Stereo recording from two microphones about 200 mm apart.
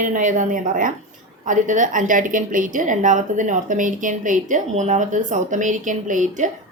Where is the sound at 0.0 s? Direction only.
40° right (ahead or behind).